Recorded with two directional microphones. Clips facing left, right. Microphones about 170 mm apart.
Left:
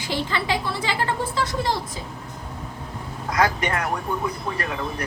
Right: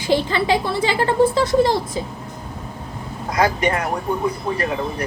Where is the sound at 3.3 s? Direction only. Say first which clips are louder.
Right 4 dB; 20° right (ahead or behind).